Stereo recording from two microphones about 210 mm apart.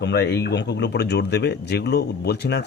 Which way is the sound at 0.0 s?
55° left (ahead or behind).